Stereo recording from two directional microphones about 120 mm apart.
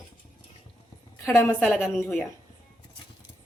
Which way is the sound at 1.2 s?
20° left (ahead or behind).